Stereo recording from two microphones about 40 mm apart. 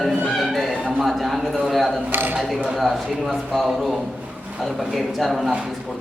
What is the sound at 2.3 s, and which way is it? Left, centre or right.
Speech, centre.